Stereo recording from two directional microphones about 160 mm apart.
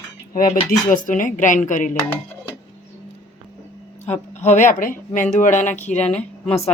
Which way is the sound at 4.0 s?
45° left (ahead or behind).